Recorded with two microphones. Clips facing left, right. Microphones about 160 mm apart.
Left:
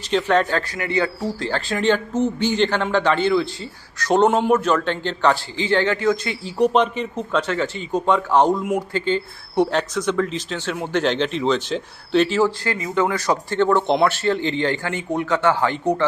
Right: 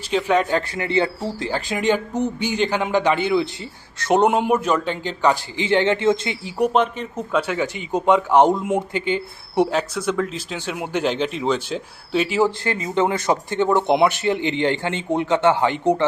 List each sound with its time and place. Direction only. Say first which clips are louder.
0.1 s speech: even; 10° right (ahead or behind)
0.7 s speech: right 1 dB; 25° right (ahead or behind)
1.5 s speech: left 1 dB; 15° right (ahead or behind)
4.2 s speech: left 3 dB; 10° right (ahead or behind)
7.2 s speech: right 1 dB; 10° right (ahead or behind)